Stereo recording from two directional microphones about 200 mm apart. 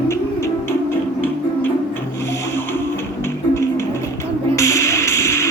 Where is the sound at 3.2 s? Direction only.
15° left (ahead or behind).